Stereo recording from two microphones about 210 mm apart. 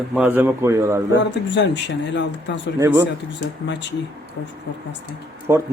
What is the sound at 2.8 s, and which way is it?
Speech, 10° right (ahead or behind).